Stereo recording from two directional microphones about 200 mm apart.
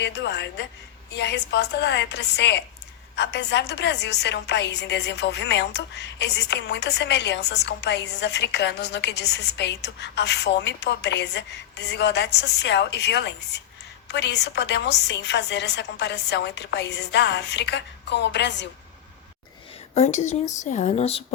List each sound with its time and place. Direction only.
0.0 s a woman's voice: 60° left (ahead or behind)
19.9 s speech: 35° left (ahead or behind)